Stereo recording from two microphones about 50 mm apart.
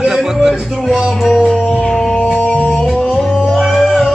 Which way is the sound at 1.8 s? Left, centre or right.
Centre.